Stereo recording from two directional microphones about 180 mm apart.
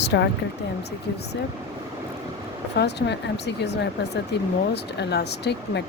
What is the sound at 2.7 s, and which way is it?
Speech, 70° left (ahead or behind).